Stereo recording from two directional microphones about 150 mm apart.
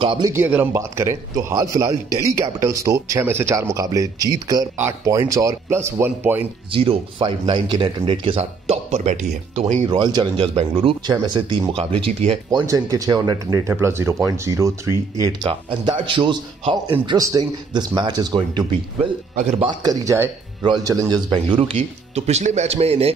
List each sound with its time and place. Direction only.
0.0 s speech: 35° right (ahead or behind)
0.3 s a man's voice: 15° right (ahead or behind)
6.7 s speech: 40° right (ahead or behind)
9.8 s speech: 30° right (ahead or behind)
12.6 s a man's voice: 25° right (ahead or behind)
15.7 s a man's voice: 30° right (ahead or behind)